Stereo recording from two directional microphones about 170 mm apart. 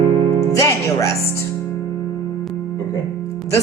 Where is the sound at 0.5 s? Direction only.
20° left (ahead or behind).